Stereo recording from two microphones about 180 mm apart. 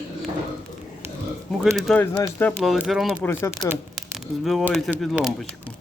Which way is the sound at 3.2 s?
15° left (ahead or behind).